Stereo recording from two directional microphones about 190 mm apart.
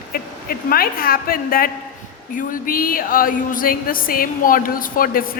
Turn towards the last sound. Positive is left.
turn(degrees=50)  # may be behind; listen again after turning